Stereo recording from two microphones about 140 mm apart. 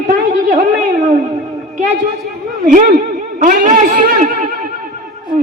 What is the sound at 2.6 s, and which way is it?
A man's voice, 75° right (ahead or behind).